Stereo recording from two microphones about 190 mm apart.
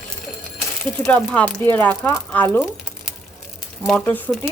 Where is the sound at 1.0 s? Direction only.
5° left (ahead or behind).